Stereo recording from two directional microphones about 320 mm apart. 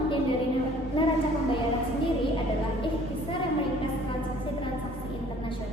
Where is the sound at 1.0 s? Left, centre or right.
Centre.